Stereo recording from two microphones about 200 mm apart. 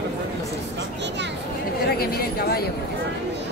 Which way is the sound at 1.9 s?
50° left (ahead or behind).